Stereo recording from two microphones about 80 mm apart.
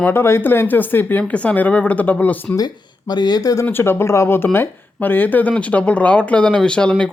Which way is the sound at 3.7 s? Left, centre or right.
Left.